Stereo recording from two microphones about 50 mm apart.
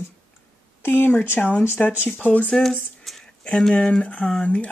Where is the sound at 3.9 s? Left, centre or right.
Left.